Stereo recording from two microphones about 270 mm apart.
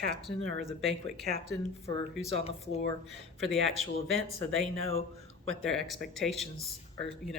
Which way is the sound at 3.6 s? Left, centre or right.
Right.